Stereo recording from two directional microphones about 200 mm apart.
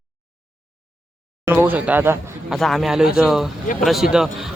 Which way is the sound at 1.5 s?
10° right (ahead or behind).